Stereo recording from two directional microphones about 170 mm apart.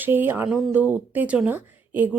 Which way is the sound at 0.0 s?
10° right (ahead or behind).